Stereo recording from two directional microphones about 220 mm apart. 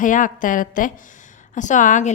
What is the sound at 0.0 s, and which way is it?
A woman's voice, 35° left (ahead or behind).